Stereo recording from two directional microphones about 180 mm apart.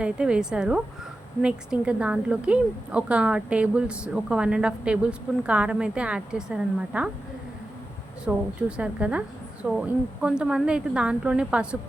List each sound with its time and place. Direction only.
0.0 s a woman's voice: 5° right (ahead or behind)
8.2 s a woman's voice: 5° right (ahead or behind)